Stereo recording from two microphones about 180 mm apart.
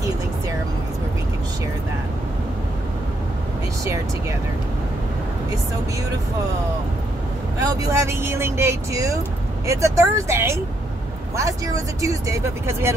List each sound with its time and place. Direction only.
7.5 s speech: 20° right (ahead or behind)